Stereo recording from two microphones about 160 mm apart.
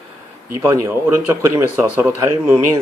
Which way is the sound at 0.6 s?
15° right (ahead or behind).